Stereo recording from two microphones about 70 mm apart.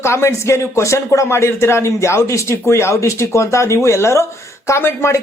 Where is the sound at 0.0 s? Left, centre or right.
Left.